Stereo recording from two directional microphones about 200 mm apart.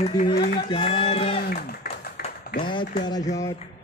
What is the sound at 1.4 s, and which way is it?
Speech, 50° left (ahead or behind).